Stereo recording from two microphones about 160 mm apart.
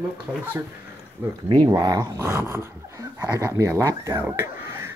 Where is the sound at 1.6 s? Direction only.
20° right (ahead or behind).